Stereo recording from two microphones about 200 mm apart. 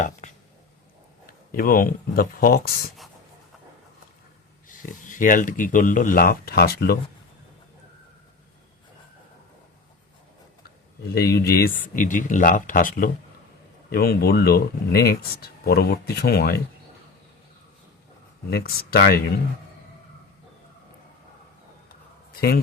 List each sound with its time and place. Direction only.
0.0 s a sound: 40° left (ahead or behind)
1.3 s speech: 45° left (ahead or behind)
4.7 s speech: 40° left (ahead or behind)
11.1 s speech: 50° left (ahead or behind)
18.5 s speech: 50° left (ahead or behind)
21.8 s a sound: 50° left (ahead or behind)